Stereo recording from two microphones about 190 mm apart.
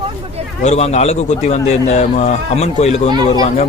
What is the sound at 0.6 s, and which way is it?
A man's voice, 35° left (ahead or behind).